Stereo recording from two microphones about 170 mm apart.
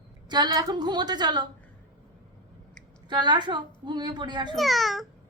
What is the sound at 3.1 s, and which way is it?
A woman's voice, 25° right (ahead or behind).